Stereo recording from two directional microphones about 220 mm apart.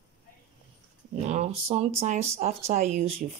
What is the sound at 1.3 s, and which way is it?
Speech, 30° right (ahead or behind).